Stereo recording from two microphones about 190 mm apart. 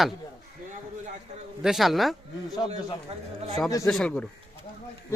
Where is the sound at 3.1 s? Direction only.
35° right (ahead or behind).